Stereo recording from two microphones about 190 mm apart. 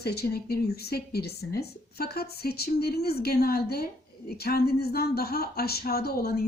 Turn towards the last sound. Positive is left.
turn(degrees=55)  # may be behind; listen again after turning